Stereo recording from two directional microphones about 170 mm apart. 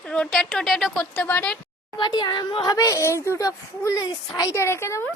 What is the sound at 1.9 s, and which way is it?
A woman's voice, 25° left (ahead or behind).